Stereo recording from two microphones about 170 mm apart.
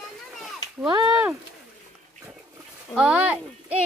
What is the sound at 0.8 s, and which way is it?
Speech, 25° right (ahead or behind).